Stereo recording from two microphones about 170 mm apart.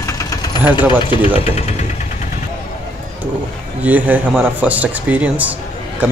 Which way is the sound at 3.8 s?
10° right (ahead or behind).